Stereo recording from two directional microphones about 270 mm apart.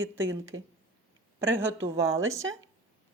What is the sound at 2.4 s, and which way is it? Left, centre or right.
Speech, right.